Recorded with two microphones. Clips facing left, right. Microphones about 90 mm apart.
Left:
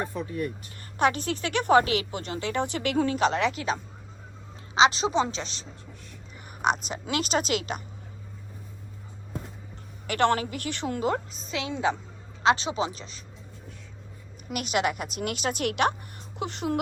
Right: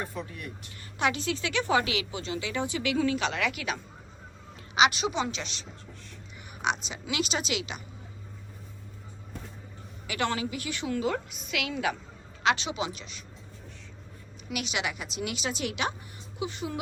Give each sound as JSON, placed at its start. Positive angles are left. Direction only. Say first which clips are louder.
{"t": 0.0, "sound": "a woman's voice", "louder": "left 6 dB", "side_deg": 35}
{"t": 6.6, "sound": "speech", "louder": "left 4 dB", "side_deg": 45}
{"t": 10.1, "sound": "a woman's voice", "louder": "left 6 dB", "side_deg": 55}
{"t": 14.5, "sound": "speech", "louder": "left 6 dB", "side_deg": 45}